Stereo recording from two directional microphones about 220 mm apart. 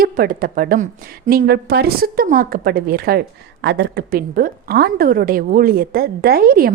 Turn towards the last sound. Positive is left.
turn(degrees=-45)  # may be behind; listen again after turning